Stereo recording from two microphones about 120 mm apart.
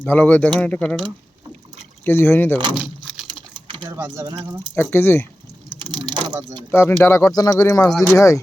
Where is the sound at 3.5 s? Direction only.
40° right (ahead or behind).